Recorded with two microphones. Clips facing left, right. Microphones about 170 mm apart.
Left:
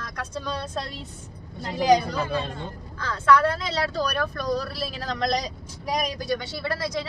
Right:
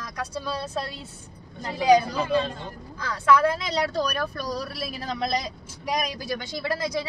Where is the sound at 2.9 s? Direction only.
10° right (ahead or behind).